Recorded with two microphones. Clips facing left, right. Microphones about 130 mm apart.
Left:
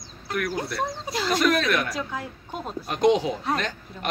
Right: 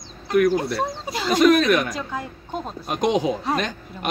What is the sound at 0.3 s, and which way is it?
Speech, 20° right (ahead or behind).